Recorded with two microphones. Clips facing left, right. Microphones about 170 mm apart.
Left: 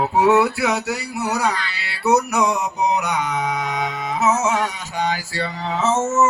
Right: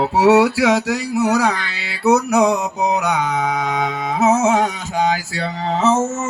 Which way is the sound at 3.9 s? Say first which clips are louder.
Right 4 dB; 55° right (ahead or behind).